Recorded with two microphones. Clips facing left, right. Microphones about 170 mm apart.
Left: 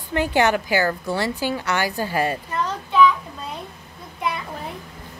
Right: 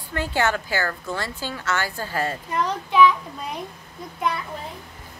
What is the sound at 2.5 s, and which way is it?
Speech, 15° right (ahead or behind).